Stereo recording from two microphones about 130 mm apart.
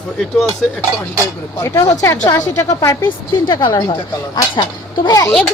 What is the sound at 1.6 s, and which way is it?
A woman's voice, 25° left (ahead or behind).